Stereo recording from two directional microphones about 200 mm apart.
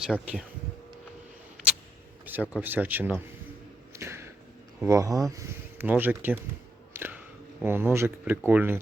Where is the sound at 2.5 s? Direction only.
10° right (ahead or behind).